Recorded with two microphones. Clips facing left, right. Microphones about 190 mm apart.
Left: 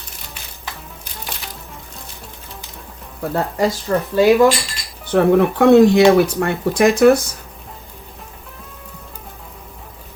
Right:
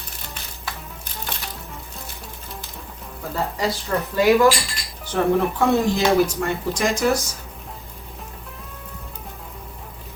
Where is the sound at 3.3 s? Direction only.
55° left (ahead or behind).